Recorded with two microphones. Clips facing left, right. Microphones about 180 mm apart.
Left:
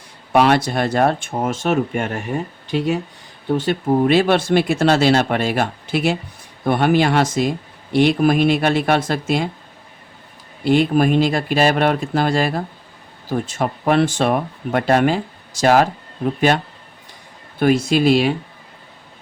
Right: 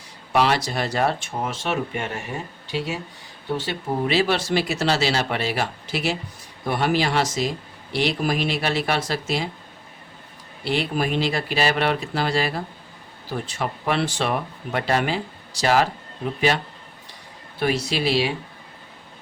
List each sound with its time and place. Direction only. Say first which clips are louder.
0.3 s speech: left 6 dB; 55° left (ahead or behind)
10.6 s speech: left 9 dB; 50° left (ahead or behind)
17.6 s speech: left 8 dB; 50° left (ahead or behind)